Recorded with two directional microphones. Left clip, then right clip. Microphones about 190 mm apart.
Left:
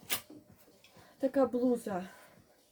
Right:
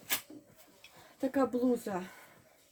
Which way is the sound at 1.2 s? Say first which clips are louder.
Left 1 dB; 15° right (ahead or behind).